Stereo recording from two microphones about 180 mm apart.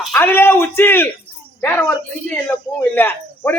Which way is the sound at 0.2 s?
15° left (ahead or behind).